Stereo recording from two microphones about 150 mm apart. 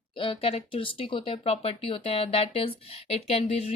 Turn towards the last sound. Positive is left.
turn(degrees=40)  # may be behind; listen again after turning